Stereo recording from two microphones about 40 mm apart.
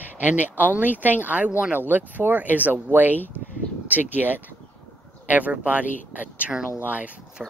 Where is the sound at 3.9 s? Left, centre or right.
Right.